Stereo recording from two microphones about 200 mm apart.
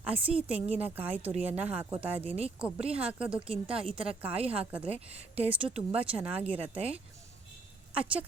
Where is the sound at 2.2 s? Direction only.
30° right (ahead or behind).